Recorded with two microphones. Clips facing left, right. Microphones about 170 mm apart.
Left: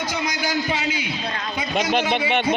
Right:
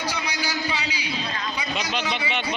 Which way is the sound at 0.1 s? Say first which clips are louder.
Left 4 dB; 50° left (ahead or behind).